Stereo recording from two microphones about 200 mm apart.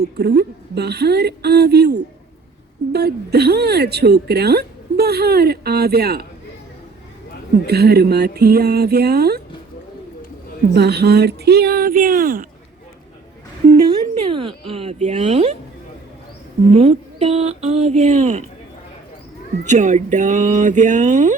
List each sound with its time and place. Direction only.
0.0 s a woman's voice: 55° right (ahead or behind)
7.7 s a woman's voice: 55° right (ahead or behind)
10.8 s a woman's voice: 55° right (ahead or behind)
13.7 s speech: 20° right (ahead or behind); by 15.5 s 35° right (ahead or behind)
16.7 s speech: 30° right (ahead or behind)
19.6 s speech: 40° right (ahead or behind)